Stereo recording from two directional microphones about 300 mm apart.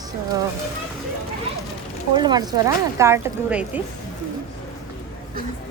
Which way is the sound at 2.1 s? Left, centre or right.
Centre.